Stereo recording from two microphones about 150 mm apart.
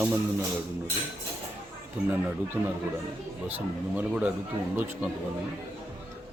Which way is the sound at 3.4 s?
10° right (ahead or behind).